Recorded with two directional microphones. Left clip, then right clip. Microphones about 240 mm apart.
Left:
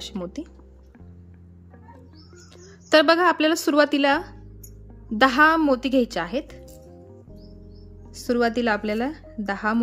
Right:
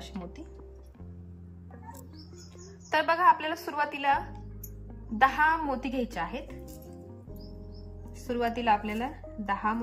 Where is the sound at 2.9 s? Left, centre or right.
Left.